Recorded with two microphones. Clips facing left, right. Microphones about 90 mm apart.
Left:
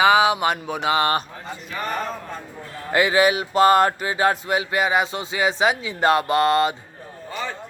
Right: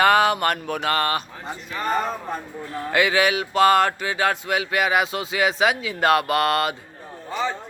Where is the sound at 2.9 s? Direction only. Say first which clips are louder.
Left 2 dB; 35° left (ahead or behind).